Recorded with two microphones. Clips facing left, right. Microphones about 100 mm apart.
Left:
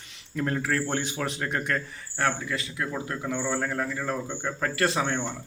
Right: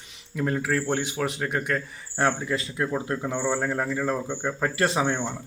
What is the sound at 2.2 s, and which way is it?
A man's voice, 25° right (ahead or behind).